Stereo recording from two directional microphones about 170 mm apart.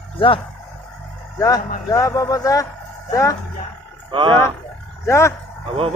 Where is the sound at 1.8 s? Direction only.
20° left (ahead or behind).